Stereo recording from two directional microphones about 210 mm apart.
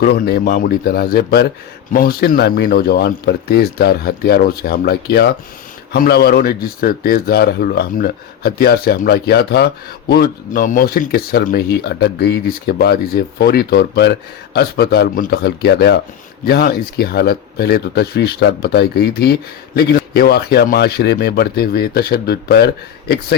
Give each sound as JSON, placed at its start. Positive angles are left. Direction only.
{"t": 0.0, "sound": "a man's voice", "side_deg": 45}